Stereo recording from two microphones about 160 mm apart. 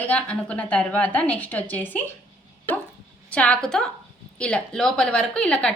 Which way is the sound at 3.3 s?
5° left (ahead or behind).